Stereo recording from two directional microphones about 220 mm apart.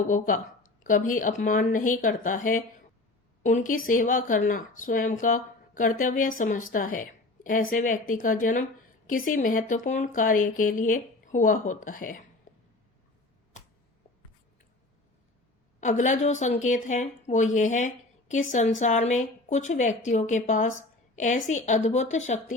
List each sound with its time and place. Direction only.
0.1 s speech: 35° left (ahead or behind)
12.5 s a sound: 35° left (ahead or behind)
15.8 s speech: 35° left (ahead or behind)